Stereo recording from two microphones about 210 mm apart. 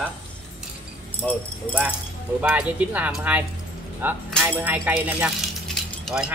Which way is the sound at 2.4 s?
5° right (ahead or behind).